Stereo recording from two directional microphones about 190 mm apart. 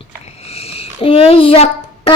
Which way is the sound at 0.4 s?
30° left (ahead or behind).